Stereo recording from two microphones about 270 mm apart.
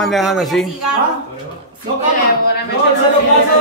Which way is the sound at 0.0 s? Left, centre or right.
Centre.